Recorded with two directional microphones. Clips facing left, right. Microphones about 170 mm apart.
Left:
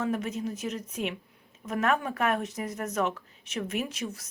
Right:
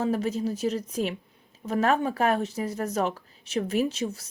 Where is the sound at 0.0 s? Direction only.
35° right (ahead or behind).